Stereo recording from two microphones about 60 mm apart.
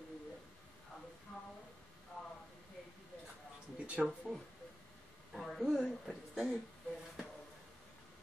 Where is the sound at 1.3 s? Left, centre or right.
Centre.